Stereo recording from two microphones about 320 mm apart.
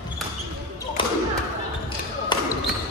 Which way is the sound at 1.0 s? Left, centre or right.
Centre.